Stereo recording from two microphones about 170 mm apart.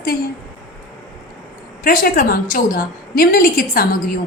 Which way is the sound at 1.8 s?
55° left (ahead or behind).